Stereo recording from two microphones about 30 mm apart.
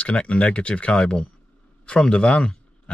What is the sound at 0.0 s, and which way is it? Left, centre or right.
Speech, left.